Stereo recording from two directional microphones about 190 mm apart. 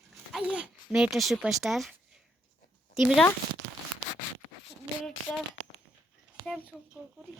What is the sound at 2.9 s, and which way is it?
Speech, centre (ahead or behind).